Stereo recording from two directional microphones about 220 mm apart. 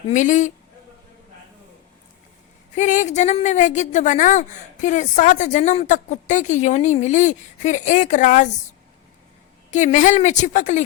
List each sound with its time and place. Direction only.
0.1 s a woman's voice: 35° left (ahead or behind)
2.7 s a woman's voice: 35° left (ahead or behind)
9.7 s a woman's voice: 35° left (ahead or behind)